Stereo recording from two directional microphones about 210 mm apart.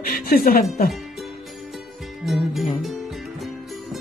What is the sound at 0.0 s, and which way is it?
Speech, 45° left (ahead or behind).